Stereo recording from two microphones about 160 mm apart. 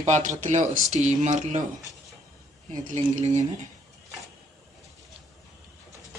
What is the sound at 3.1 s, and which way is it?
Speech, 45° right (ahead or behind).